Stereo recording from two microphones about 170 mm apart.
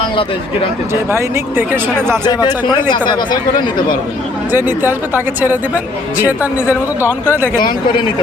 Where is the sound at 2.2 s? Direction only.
25° left (ahead or behind).